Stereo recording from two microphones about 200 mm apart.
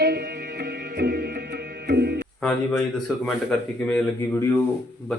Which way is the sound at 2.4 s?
5° left (ahead or behind).